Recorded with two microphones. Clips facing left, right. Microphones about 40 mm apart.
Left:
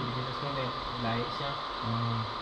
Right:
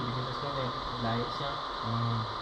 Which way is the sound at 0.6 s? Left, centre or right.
Left.